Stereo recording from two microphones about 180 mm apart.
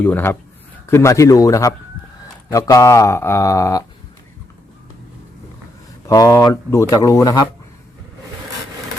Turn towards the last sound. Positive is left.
turn(degrees=20)  # may be behind; listen again after turning